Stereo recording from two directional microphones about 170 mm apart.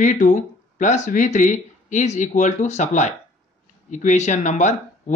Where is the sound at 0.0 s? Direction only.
50° left (ahead or behind).